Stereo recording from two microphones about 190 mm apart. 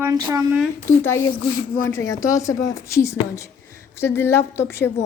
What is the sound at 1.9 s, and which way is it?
A woman's voice, 15° left (ahead or behind).